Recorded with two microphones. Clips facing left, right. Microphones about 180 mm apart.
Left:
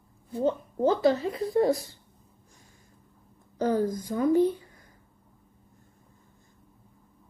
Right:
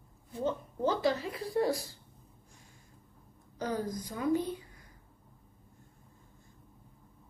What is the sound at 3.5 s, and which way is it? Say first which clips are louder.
Speech: left 9 dB; 50° left (ahead or behind).